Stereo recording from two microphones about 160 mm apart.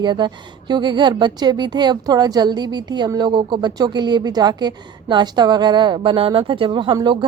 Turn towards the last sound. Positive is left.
turn(degrees=-30)  # may be behind; listen again after turning